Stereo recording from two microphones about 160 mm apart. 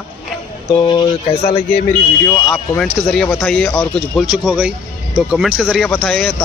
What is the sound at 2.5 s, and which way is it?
Speech, 5° left (ahead or behind).